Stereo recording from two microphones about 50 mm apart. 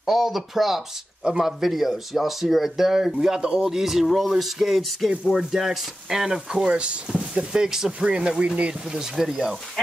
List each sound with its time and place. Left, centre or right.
0.0 s speech: centre; by 8.7 s right
9.2 s speech: centre